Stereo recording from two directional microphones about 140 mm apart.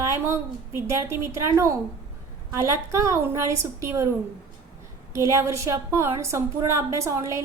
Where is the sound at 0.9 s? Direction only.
20° right (ahead or behind).